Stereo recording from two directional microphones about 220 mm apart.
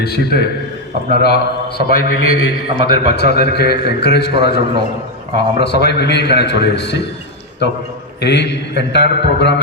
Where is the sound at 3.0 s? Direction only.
50° left (ahead or behind).